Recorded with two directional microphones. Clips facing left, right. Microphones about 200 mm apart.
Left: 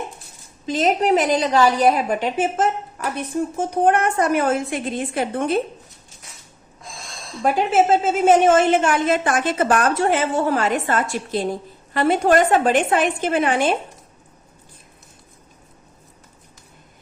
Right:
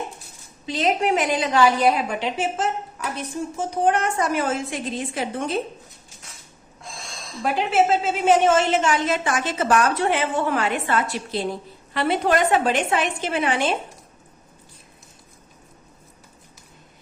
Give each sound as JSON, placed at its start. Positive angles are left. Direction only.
{"t": 0.6, "sound": "a woman's voice", "side_deg": 45}
{"t": 7.4, "sound": "a woman's voice", "side_deg": 50}